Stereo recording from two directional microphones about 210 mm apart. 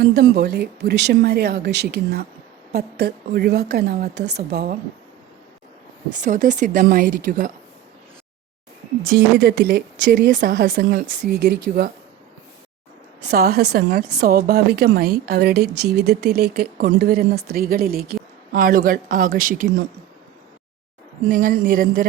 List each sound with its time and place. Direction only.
0.0 s speech: 50° right (ahead or behind)
6.1 s a woman's voice: 35° right (ahead or behind)
9.0 s speech: 50° right (ahead or behind)
13.2 s speech: 45° right (ahead or behind)
21.2 s a woman's voice: 40° right (ahead or behind)